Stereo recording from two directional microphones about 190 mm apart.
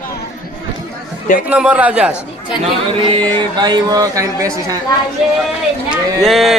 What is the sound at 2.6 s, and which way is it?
Speech, 30° right (ahead or behind).